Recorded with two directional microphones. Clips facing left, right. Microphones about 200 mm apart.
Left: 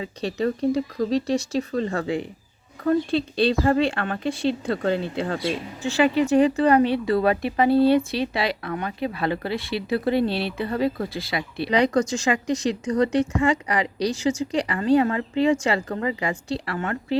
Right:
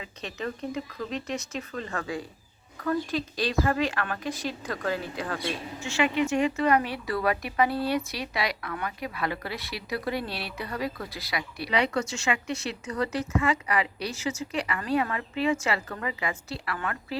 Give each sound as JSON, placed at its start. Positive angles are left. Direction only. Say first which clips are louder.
{"t": 0.0, "sound": "a woman's voice", "louder": "left 10 dB", "side_deg": 35}